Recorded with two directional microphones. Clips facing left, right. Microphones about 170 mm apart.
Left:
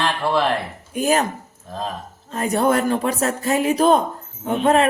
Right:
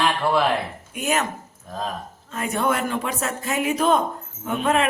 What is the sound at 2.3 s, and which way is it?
Speech, 35° left (ahead or behind).